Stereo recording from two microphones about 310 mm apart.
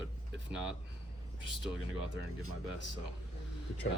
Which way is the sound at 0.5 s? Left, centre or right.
Centre.